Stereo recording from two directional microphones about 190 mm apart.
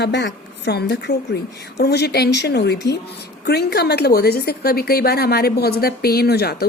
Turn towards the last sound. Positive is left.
turn(degrees=55)  # may be behind; listen again after turning